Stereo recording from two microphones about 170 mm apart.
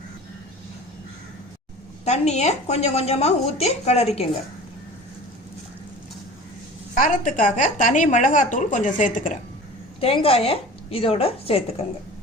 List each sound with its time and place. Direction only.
2.0 s a woman's voice: 40° left (ahead or behind)
7.0 s a woman's voice: 50° left (ahead or behind)
10.0 s a woman's voice: 35° left (ahead or behind)